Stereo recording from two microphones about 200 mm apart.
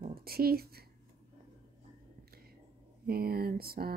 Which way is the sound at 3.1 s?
50° right (ahead or behind).